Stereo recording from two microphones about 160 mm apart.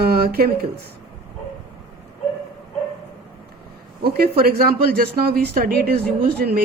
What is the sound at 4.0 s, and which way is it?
A woman's voice, 75° right (ahead or behind).